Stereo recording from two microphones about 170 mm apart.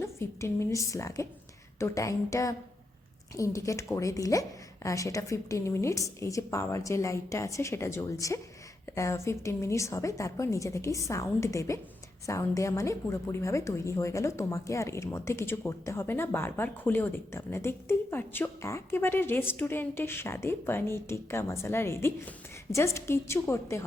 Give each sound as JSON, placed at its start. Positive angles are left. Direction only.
{"t": 0.0, "sound": "a woman's voice", "side_deg": 15}